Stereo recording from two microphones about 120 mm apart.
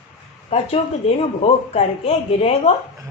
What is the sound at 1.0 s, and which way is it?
A woman's voice, 55° left (ahead or behind).